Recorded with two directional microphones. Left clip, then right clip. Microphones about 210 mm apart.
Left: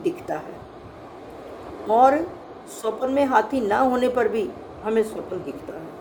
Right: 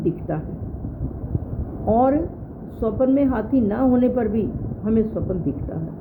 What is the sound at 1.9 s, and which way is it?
A woman's voice, 15° left (ahead or behind).